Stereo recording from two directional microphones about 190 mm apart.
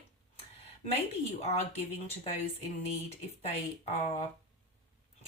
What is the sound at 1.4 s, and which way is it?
Speech, 35° left (ahead or behind).